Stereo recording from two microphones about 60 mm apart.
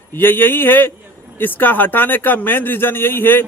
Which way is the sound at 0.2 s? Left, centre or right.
Left.